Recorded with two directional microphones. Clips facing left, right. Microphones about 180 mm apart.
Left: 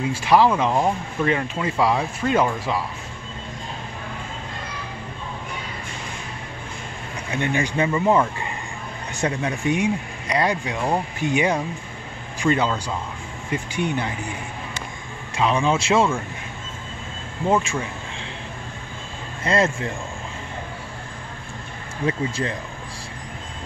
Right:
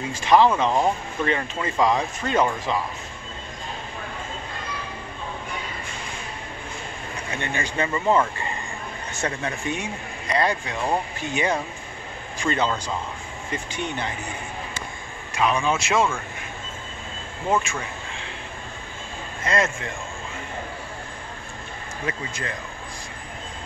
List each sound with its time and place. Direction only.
0.1 s speech: 10° left (ahead or behind)
7.3 s speech: 15° left (ahead or behind)
15.3 s a man's voice: 25° left (ahead or behind)
19.4 s a man's voice: 30° left (ahead or behind)
22.0 s a man's voice: 30° left (ahead or behind)